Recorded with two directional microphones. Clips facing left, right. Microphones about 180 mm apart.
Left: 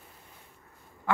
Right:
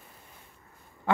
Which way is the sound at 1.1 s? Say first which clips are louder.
Right 2 dB; 25° right (ahead or behind).